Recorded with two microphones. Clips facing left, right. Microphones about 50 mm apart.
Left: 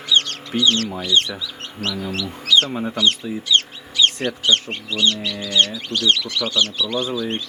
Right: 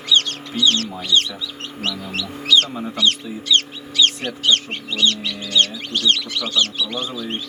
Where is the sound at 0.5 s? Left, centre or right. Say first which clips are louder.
Left 1 dB; left.